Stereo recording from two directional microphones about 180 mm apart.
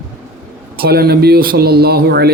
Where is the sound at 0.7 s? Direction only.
60° right (ahead or behind).